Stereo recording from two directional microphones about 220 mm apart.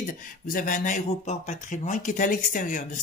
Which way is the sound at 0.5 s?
40° left (ahead or behind).